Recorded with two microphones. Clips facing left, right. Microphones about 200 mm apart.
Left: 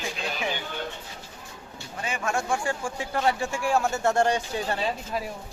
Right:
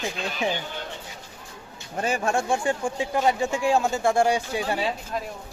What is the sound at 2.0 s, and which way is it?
Speech, 35° right (ahead or behind).